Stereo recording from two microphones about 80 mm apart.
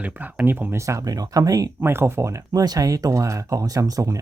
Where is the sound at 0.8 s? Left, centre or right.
Right.